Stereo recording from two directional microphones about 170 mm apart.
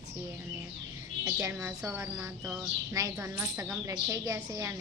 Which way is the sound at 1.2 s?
15° right (ahead or behind).